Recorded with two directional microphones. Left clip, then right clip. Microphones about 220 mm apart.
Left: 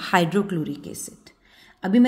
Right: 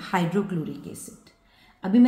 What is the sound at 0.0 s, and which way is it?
Speech, 45° left (ahead or behind).